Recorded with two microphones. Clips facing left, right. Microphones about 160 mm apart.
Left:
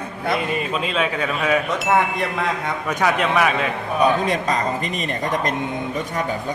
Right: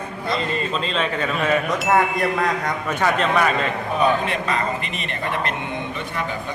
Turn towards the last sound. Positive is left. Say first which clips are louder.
# left 3 dB
turn(degrees=40)  # may be behind; listen again after turning